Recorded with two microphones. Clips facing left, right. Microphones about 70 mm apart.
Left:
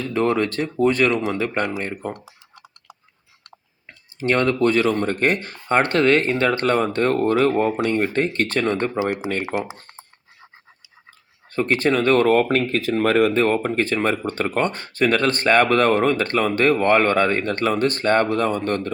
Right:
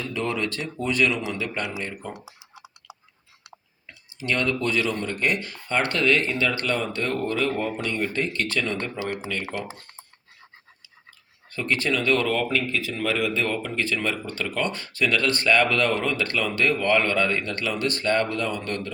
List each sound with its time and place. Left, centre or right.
0.0 s speech: left
2.1 s computer keyboard: centre
3.8 s clicking: left
4.6 s speech: left
11.5 s speech: left